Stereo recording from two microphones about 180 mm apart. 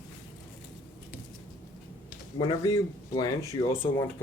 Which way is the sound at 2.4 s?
20° left (ahead or behind).